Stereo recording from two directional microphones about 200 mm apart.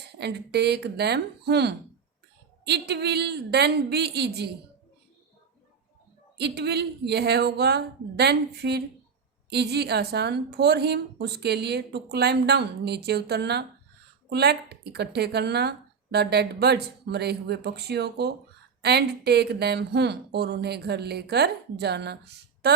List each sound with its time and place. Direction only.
0.2 s a woman's voice: 55° right (ahead or behind)
6.3 s a woman's voice: 55° right (ahead or behind)